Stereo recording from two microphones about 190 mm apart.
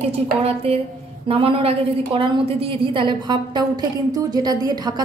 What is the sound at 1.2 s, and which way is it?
A woman's voice, 30° right (ahead or behind).